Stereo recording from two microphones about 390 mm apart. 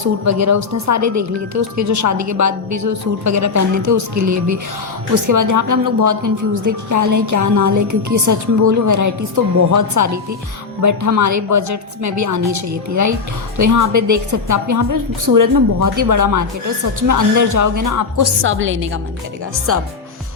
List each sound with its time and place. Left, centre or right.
0.3 s a woman's voice: right
18.4 s a woman's voice: right